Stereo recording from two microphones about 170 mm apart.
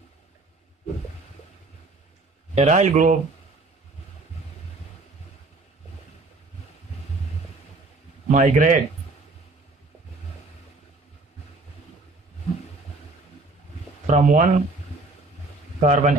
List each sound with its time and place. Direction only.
2.5 s a man's voice: 45° right (ahead or behind)
8.3 s a man's voice: 45° right (ahead or behind)
14.0 s speech: 45° right (ahead or behind)
15.8 s a man's voice: 45° right (ahead or behind)